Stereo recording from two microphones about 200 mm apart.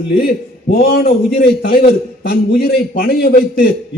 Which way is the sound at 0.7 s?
45° left (ahead or behind).